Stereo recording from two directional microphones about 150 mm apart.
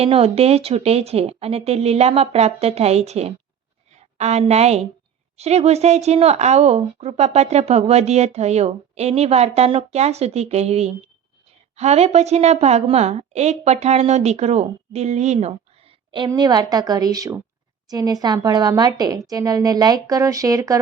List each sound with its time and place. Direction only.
0.0 s a woman's voice: 40° right (ahead or behind); by 20.7 s 20° right (ahead or behind)